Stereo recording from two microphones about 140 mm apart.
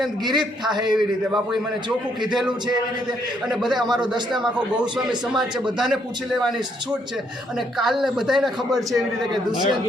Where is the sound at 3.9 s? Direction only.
30° right (ahead or behind).